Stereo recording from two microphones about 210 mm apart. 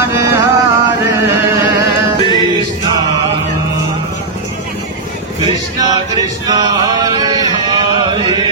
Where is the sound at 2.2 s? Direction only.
20° left (ahead or behind).